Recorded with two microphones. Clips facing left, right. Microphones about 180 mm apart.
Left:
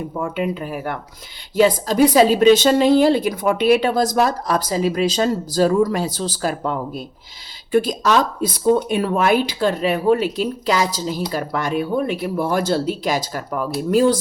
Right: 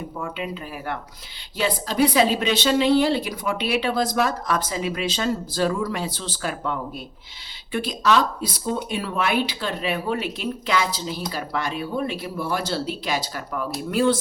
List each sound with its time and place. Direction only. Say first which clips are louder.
0.2 s a woman's voice: left 8 dB; 45° left (ahead or behind)